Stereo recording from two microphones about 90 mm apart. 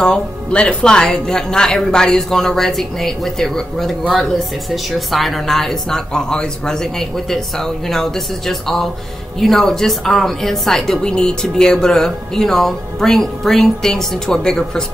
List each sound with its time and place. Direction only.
0.0 s a woman's voice: 10° left (ahead or behind)